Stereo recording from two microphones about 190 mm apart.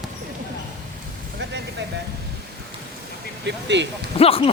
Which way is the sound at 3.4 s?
70° right (ahead or behind).